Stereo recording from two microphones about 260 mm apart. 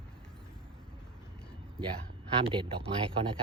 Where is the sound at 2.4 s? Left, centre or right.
Centre.